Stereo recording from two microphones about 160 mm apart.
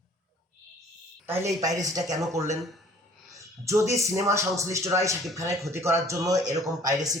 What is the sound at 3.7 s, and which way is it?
A man's voice, 20° right (ahead or behind).